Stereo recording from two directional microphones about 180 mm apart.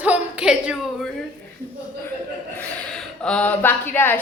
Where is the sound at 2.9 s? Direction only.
5° left (ahead or behind).